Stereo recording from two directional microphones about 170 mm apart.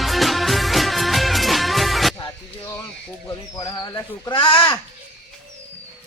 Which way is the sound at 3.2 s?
20° left (ahead or behind).